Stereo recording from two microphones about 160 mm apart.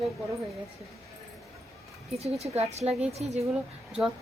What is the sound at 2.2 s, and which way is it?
Speech, 40° right (ahead or behind).